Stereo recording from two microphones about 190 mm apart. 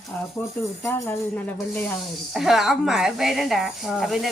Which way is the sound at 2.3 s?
Centre (ahead or behind).